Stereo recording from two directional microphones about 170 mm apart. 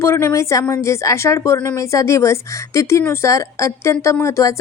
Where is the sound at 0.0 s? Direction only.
15° left (ahead or behind).